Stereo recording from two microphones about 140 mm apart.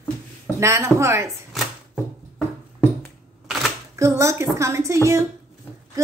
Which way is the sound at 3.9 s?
20° right (ahead or behind).